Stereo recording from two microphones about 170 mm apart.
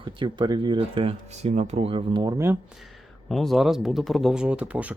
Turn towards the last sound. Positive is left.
turn(degrees=-10)  # may be behind; listen again after turning